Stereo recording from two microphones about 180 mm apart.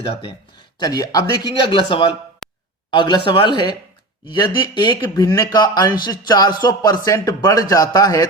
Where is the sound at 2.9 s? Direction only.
25° left (ahead or behind).